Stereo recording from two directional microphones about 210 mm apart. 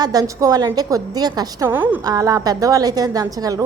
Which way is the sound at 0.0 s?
15° right (ahead or behind).